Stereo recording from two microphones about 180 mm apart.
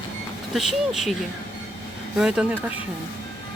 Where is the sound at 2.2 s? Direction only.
5° right (ahead or behind).